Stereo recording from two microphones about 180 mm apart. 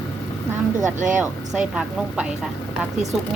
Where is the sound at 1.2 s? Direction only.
5° right (ahead or behind).